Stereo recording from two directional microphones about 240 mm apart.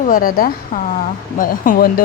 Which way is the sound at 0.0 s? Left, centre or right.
Left.